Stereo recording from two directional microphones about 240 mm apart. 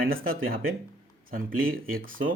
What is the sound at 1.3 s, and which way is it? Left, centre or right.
Speech, right.